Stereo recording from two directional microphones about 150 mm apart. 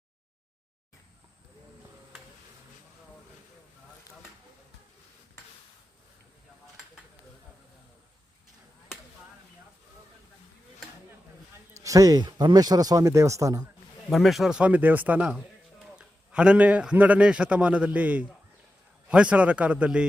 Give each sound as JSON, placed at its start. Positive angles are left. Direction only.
{"t": 11.7, "sound": "speech", "side_deg": -20}
{"t": 14.1, "sound": "a man's voice", "side_deg": 0}